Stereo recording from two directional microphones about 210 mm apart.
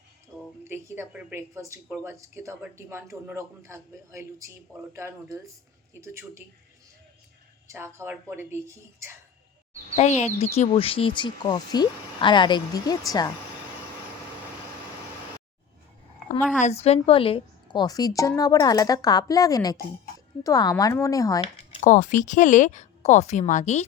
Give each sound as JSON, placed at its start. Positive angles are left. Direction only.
{"t": 0.7, "sound": "speech", "side_deg": -10}
{"t": 7.7, "sound": "speech", "side_deg": -10}
{"t": 9.9, "sound": "speech", "side_deg": 35}
{"t": 16.6, "sound": "a woman's voice", "side_deg": 30}